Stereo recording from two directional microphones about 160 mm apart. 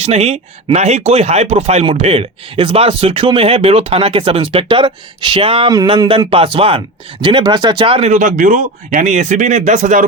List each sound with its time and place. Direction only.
0.0 s speech: 40° right (ahead or behind)
8.1 s speech: 55° right (ahead or behind)